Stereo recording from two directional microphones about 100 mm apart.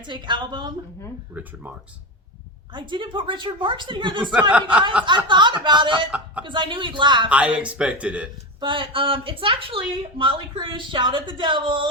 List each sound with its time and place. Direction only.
0.0 s speech: 50° right (ahead or behind)
1.3 s speech: 15° right (ahead or behind)
2.7 s speech: 50° right (ahead or behind)
6.1 s speech: 15° right (ahead or behind)
6.4 s speech: 55° right (ahead or behind)
7.3 s speech: 15° right (ahead or behind)
8.6 s speech: 55° right (ahead or behind)